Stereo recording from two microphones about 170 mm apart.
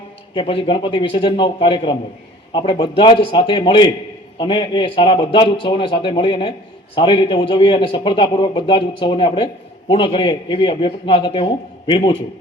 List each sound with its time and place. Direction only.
0.3 s a man's voice: 30° left (ahead or behind)